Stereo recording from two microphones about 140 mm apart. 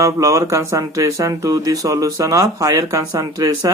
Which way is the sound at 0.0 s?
25° right (ahead or behind).